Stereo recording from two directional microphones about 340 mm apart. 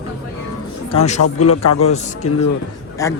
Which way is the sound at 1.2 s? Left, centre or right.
Left.